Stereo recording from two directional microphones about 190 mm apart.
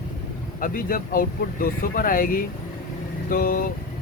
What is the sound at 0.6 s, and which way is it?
Speech, 50° left (ahead or behind).